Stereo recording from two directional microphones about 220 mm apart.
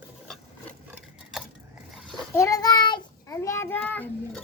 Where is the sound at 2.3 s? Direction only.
15° left (ahead or behind).